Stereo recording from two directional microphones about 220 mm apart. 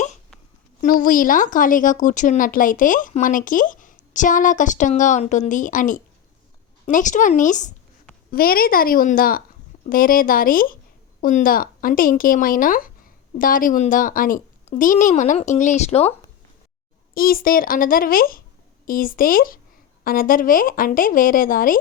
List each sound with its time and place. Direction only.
0.8 s speech: 40° left (ahead or behind)
17.2 s speech: 40° left (ahead or behind)